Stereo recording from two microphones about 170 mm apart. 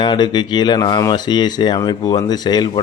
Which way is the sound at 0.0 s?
25° left (ahead or behind).